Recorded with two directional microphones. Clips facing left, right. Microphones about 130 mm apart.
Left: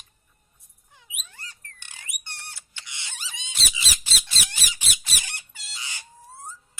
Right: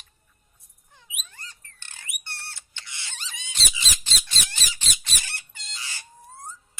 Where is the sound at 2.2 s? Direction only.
15° left (ahead or behind).